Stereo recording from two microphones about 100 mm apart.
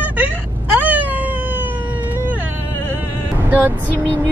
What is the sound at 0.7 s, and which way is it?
Cat, 15° right (ahead or behind).